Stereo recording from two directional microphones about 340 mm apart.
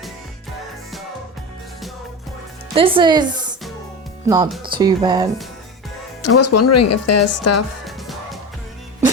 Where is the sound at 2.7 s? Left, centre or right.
Centre.